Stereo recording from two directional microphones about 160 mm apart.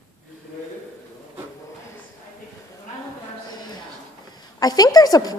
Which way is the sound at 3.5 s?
25° left (ahead or behind).